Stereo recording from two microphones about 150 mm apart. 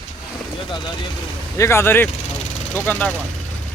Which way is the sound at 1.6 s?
15° left (ahead or behind).